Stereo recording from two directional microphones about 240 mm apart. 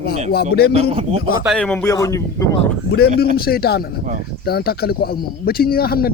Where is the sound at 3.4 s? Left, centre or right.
Left.